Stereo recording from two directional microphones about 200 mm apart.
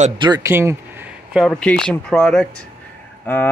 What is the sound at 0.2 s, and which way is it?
Speech, 15° right (ahead or behind).